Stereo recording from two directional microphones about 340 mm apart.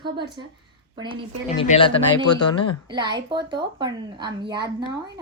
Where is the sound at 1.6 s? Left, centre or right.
Centre.